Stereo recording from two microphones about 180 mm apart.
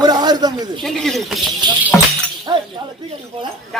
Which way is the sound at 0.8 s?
Centre (ahead or behind).